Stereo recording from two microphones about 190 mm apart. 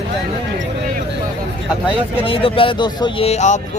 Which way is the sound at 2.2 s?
30° left (ahead or behind).